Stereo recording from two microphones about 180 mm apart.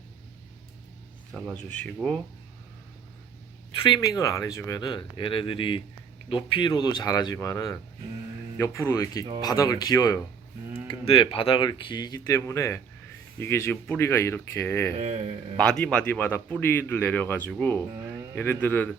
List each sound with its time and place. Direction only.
1.7 s speech: 5° left (ahead or behind)
3.8 s speech: 20° left (ahead or behind)
10.8 s speech: 30° left (ahead or behind); by 14.9 s 10° left (ahead or behind)
14.9 s speech: 40° right (ahead or behind)
15.5 s speech: 5° left (ahead or behind)